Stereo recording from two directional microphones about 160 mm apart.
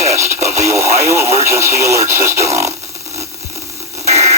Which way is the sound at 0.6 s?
20° right (ahead or behind).